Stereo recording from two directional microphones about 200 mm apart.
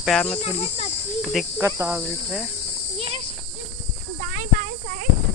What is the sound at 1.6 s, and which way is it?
Speech, 10° right (ahead or behind).